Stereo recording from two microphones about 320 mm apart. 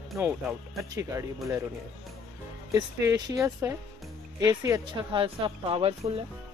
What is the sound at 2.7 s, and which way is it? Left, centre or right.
Speech, centre.